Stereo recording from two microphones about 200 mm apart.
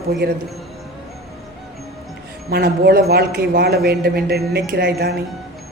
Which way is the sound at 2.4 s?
50° right (ahead or behind).